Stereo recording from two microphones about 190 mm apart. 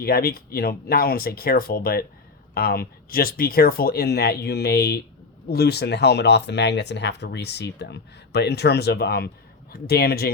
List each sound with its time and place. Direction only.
0.0 s speech: 55° left (ahead or behind)